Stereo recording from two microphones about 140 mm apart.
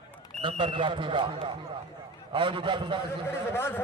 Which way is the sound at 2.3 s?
35° right (ahead or behind).